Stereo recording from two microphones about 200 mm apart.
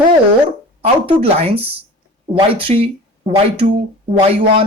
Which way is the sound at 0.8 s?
30° right (ahead or behind).